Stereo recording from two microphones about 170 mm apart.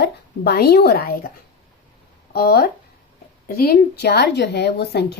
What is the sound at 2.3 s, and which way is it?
A woman's voice, 60° left (ahead or behind).